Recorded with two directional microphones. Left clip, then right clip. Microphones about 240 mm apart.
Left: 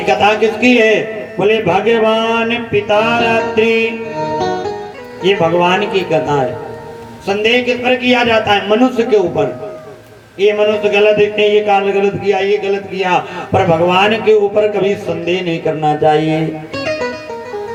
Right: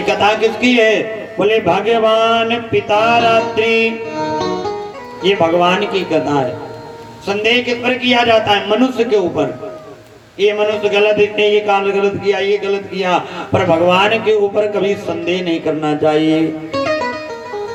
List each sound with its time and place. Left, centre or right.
0.0 s a man's voice: right
4.1 s music: centre
5.2 s a man's voice: right
10.4 s a man's voice: centre